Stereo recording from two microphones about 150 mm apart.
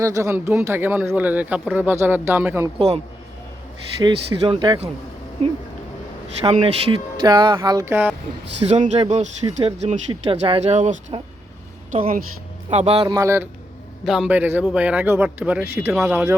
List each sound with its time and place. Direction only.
0.0 s speech: 20° right (ahead or behind)
2.7 s speech: 45° right (ahead or behind)
4.0 s speech: 30° right (ahead or behind)
6.4 s speech: 40° right (ahead or behind)
7.9 s speech: 15° right (ahead or behind)
8.6 s speech: 50° right (ahead or behind)
12.7 s speech: 40° right (ahead or behind)
13.1 s speech: 20° right (ahead or behind)
14.0 s speech: 5° right (ahead or behind)